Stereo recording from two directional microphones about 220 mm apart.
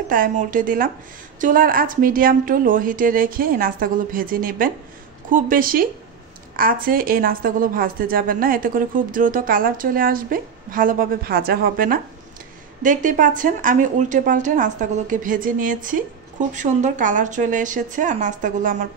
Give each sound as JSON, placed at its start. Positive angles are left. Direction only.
{"t": 0.1, "sound": "a woman's voice", "side_deg": -40}